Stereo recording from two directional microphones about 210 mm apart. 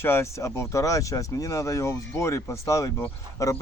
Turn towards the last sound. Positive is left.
turn(degrees=10)  # may be behind; listen again after turning